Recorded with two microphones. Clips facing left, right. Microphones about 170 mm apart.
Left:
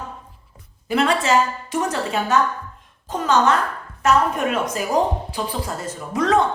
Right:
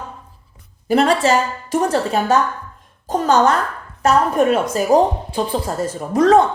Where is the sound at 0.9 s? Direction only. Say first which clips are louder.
Right 4 dB; 35° right (ahead or behind).